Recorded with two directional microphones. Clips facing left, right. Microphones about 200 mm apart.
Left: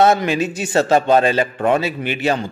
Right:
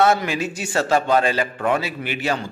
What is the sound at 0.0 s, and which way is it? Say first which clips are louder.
A man's voice: left 4 dB; 20° left (ahead or behind).